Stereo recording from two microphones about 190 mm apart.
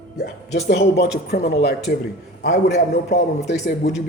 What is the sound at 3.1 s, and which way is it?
Speech, 35° left (ahead or behind).